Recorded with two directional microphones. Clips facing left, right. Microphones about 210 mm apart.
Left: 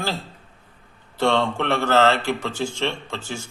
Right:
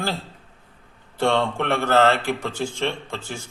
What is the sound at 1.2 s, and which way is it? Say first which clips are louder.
Speech: left 1 dB; 15° right (ahead or behind).